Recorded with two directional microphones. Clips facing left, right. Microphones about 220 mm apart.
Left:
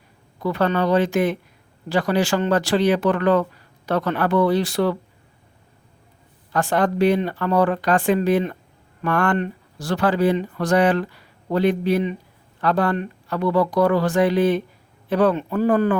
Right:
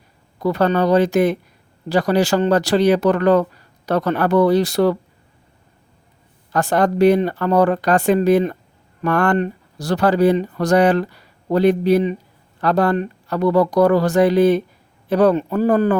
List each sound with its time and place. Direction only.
0.3 s speech: 40° right (ahead or behind)
6.5 s speech: 40° right (ahead or behind)